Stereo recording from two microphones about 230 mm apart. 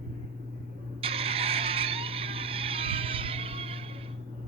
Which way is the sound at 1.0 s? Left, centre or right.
Right.